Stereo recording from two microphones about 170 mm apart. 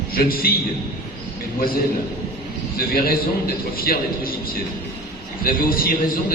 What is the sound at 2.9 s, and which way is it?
A man's voice, 60° left (ahead or behind).